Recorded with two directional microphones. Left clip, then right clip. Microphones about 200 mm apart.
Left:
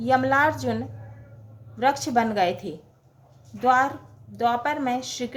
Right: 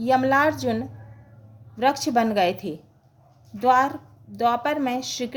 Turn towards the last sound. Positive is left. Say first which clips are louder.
# even
turn(degrees=-35)  # may be behind; listen again after turning